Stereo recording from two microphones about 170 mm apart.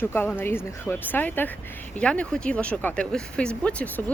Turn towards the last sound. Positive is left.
turn(degrees=10)  # may be behind; listen again after turning